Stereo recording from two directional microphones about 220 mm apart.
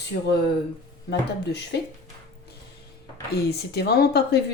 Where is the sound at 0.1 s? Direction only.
45° left (ahead or behind).